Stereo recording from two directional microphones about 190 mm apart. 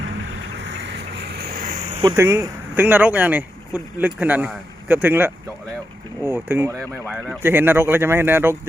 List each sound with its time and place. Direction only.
0.6 s a sound: 70° right (ahead or behind); by 2.0 s 45° right (ahead or behind)
2.1 s speech: 15° right (ahead or behind)
6.7 s speech: 5° left (ahead or behind)
7.4 s speech: 10° right (ahead or behind)